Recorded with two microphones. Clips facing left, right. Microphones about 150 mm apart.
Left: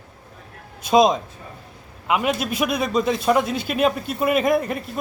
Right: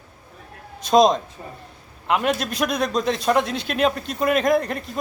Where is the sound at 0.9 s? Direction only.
5° left (ahead or behind).